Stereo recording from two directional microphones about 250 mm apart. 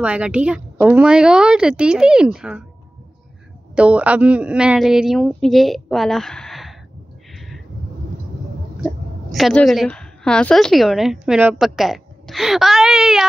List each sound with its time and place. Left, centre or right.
0.0 s a woman's voice: centre
3.7 s a woman's voice: centre
8.8 s a woman's voice: centre